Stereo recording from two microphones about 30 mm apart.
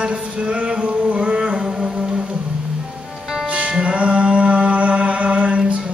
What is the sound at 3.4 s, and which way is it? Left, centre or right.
Music, right.